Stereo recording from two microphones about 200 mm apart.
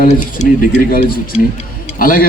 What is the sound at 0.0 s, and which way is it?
Speech, 40° left (ahead or behind).